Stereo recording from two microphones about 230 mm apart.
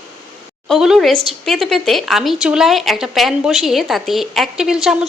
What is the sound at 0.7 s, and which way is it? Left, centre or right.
Speech, centre.